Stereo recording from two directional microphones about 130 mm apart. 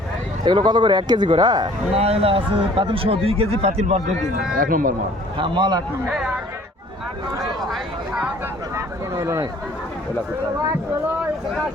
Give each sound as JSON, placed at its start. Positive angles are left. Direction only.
{"t": 0.4, "sound": "a man's voice", "side_deg": -35}
{"t": 2.0, "sound": "speech", "side_deg": -50}
{"t": 4.5, "sound": "speech", "side_deg": -90}
{"t": 5.4, "sound": "a man's voice", "side_deg": -40}
{"t": 6.1, "sound": "speech", "side_deg": -5}
{"t": 7.6, "sound": "speech", "side_deg": 0}
{"t": 8.7, "sound": "speech", "side_deg": -20}